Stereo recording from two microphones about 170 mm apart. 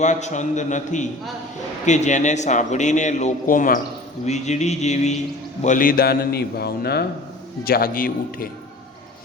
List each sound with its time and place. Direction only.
0.0 s a man's voice: 45° left (ahead or behind)
5.6 s a man's voice: 50° left (ahead or behind)